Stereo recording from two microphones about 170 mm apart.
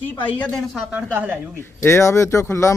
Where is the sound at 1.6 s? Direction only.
15° left (ahead or behind).